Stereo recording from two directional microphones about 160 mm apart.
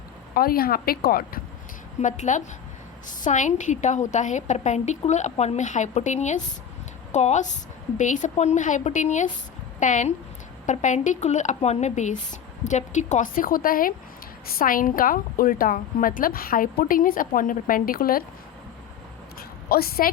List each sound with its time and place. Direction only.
0.3 s speech: 70° left (ahead or behind)
2.0 s speech: 50° left (ahead or behind); by 18.2 s 65° left (ahead or behind)
19.4 s a sound: 75° left (ahead or behind)